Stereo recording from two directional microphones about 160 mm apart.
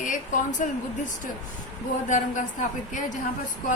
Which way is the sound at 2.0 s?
55° left (ahead or behind).